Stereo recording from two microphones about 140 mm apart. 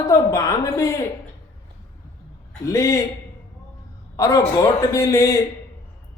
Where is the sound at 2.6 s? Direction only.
20° left (ahead or behind).